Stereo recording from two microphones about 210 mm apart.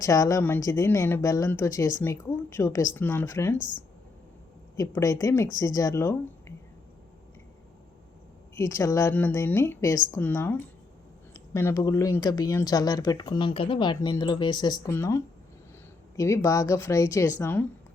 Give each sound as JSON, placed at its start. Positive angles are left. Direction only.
{"t": 0.0, "sound": "speech", "side_deg": 15}
{"t": 4.8, "sound": "speech", "side_deg": 15}
{"t": 8.5, "sound": "speech", "side_deg": 15}